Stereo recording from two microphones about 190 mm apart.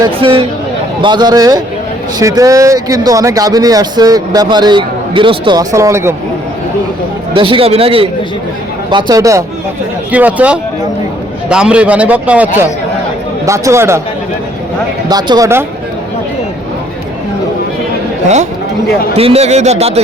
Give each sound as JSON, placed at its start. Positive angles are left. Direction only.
{"t": 0.0, "sound": "speech", "side_deg": -25}
{"t": 7.3, "sound": "a man's voice", "side_deg": -25}
{"t": 15.1, "sound": "speech", "side_deg": -20}
{"t": 18.9, "sound": "speech", "side_deg": 50}
{"t": 19.1, "sound": "a man's voice", "side_deg": -30}